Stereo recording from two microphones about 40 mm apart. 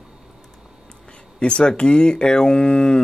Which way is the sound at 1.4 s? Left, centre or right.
Left.